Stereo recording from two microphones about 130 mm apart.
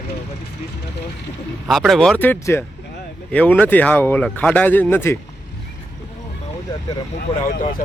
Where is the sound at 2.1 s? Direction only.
15° left (ahead or behind).